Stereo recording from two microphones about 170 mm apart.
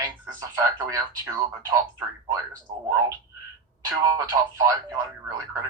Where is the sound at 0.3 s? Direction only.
20° right (ahead or behind).